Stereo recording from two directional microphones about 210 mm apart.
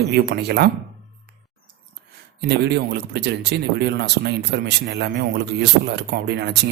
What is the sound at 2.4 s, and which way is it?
Speech, 50° right (ahead or behind).